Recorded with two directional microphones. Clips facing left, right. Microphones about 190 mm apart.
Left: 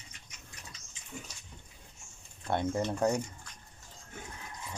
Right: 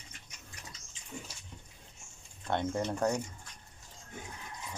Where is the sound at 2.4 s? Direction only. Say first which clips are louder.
Left 1 dB; 10° left (ahead or behind).